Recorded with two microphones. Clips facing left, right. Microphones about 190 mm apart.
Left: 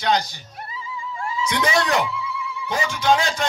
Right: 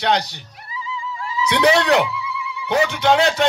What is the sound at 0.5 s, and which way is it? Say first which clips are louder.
Music: right 2 dB; 55° left (ahead or behind).